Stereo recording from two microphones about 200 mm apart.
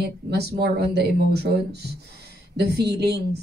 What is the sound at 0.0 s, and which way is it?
A woman's voice, 55° right (ahead or behind).